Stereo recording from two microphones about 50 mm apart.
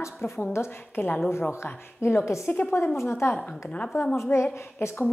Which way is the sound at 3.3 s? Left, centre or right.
Left.